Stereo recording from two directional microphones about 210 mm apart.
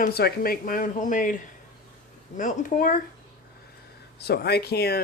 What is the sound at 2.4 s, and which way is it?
Speech, 40° left (ahead or behind).